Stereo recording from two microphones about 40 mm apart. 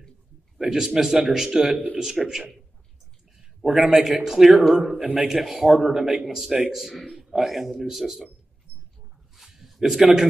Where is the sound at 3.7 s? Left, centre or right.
Centre.